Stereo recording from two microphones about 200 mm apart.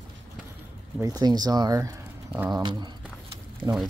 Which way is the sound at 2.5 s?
20° right (ahead or behind).